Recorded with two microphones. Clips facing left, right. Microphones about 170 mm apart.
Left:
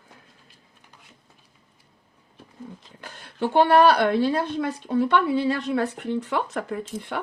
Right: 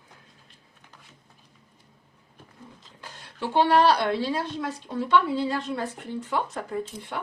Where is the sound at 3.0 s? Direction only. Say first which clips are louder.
Left 6 dB; 55° left (ahead or behind).